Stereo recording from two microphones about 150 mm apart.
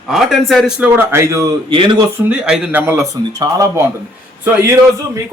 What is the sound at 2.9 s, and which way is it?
A man's voice, 20° right (ahead or behind).